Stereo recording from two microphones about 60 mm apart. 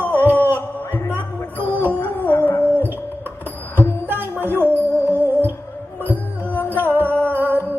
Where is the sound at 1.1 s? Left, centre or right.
Right.